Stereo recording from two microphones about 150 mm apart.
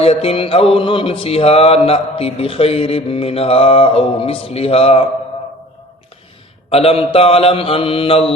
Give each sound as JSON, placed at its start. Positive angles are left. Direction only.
{"t": 0.0, "sound": "mantra", "side_deg": 40}
{"t": 6.7, "sound": "mantra", "side_deg": 40}